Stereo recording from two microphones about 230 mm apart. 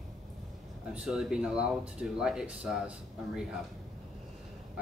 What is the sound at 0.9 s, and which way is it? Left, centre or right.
Speech, centre.